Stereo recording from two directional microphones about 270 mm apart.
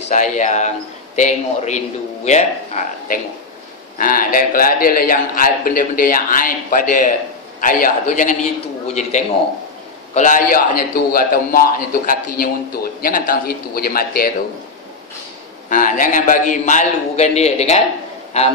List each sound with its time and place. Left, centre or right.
0.1 s a man's voice: left
15.7 s a man's voice: left